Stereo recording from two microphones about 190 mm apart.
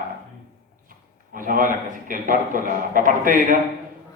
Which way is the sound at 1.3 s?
45° right (ahead or behind).